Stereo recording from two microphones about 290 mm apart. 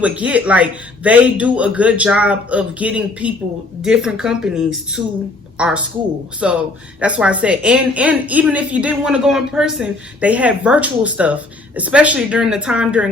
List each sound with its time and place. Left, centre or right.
0.0 s a woman's voice: centre